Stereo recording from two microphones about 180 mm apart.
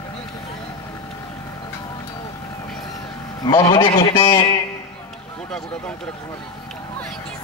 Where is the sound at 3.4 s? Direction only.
20° left (ahead or behind).